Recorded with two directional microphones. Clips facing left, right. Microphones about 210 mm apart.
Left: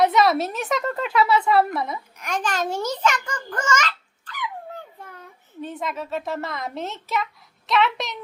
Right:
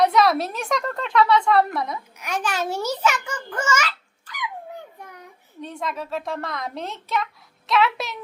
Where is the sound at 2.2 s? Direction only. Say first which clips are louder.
Left 1 dB; 10° right (ahead or behind).